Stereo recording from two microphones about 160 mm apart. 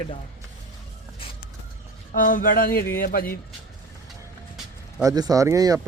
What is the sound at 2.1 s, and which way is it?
Speech, 60° left (ahead or behind).